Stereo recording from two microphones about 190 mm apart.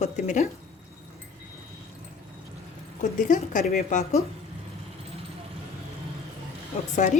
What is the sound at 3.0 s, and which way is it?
A woman's voice, 40° left (ahead or behind).